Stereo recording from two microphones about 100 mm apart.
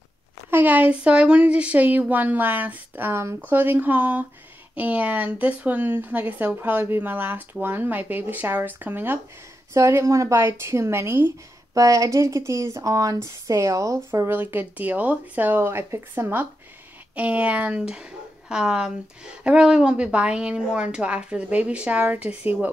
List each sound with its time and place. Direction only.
0.5 s a woman's voice: 15° right (ahead or behind)
11.7 s a woman's voice: 35° right (ahead or behind); by 22.7 s 15° right (ahead or behind)